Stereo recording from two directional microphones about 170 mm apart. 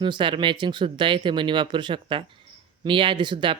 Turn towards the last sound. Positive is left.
turn(degrees=-30)  # may be behind; listen again after turning